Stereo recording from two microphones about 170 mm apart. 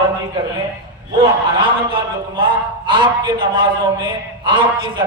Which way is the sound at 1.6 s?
30° right (ahead or behind).